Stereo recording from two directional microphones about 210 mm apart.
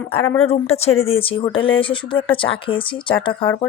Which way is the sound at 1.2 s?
25° left (ahead or behind).